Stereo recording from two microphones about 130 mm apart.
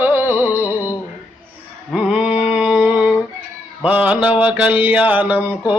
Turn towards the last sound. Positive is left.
turn(degrees=-10)  # may be behind; listen again after turning